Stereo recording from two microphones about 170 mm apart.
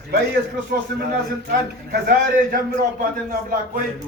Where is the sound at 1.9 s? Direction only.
60° right (ahead or behind).